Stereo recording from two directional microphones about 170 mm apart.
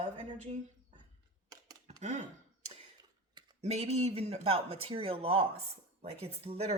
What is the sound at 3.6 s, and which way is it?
Speech, 40° right (ahead or behind).